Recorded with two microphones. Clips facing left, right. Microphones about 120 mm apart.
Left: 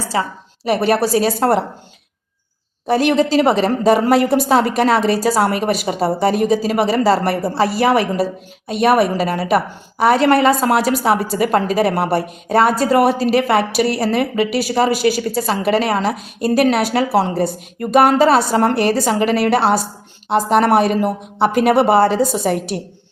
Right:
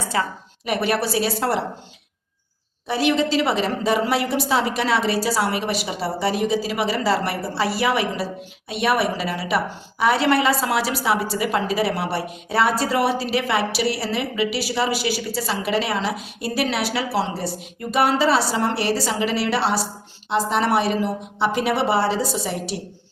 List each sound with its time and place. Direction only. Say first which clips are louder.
0.0 s a woman's voice: left 3 dB; 30° left (ahead or behind)
2.8 s a woman's voice: left 5 dB; 45° left (ahead or behind)